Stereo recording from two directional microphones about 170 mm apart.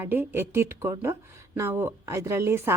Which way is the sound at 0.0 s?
10° right (ahead or behind).